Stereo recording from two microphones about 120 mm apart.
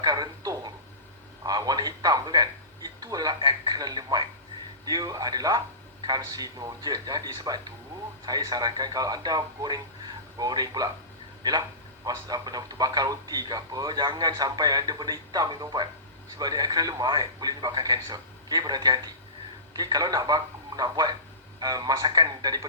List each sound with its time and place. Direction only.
0.0 s a sound: 35° right (ahead or behind)
1.5 s a man's voice: 35° right (ahead or behind)
12.0 s a man's voice: 35° right (ahead or behind)